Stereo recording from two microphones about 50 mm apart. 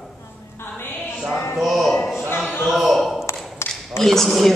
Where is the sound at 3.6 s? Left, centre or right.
Left.